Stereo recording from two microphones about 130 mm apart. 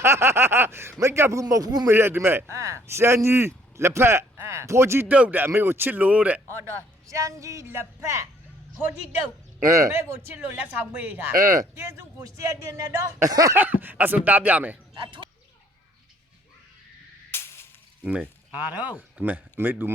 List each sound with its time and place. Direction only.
0.0 s speech: 20° right (ahead or behind)
1.9 s speech: 20° right (ahead or behind)
7.1 s speech: 25° right (ahead or behind)
9.9 s speech: 15° right (ahead or behind)
12.1 s speech: 25° right (ahead or behind)
13.6 s speech: 15° right (ahead or behind)
14.9 s speech: 40° right (ahead or behind)
17.3 s a sound: 20° left (ahead or behind)
18.0 s speech: 10° right (ahead or behind)